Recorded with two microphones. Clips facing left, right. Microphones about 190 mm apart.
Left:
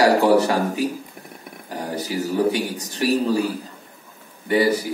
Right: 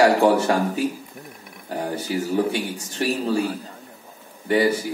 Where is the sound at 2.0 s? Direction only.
35° left (ahead or behind).